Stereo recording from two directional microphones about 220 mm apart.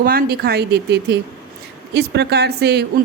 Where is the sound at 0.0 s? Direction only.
40° right (ahead or behind).